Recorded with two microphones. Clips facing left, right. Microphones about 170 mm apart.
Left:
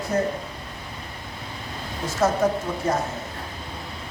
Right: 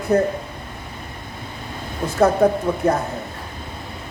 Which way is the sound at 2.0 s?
60° right (ahead or behind).